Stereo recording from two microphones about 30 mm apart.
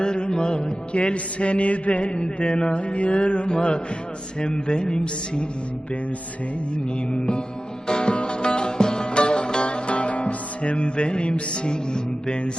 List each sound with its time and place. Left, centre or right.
0.0 s music: left
2.1 s music: left
7.1 s music: left